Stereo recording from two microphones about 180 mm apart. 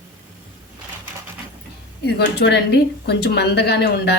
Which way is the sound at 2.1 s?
70° left (ahead or behind).